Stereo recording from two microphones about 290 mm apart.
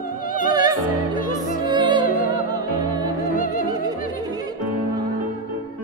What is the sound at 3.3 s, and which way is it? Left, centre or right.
Music, left.